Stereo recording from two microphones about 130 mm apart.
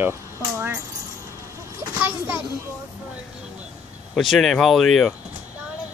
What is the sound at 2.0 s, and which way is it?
Children playing, 15° right (ahead or behind).